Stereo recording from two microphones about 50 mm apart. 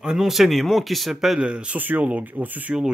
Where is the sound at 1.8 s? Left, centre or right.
Right.